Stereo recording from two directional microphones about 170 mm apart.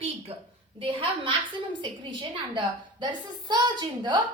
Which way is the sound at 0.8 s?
30° right (ahead or behind).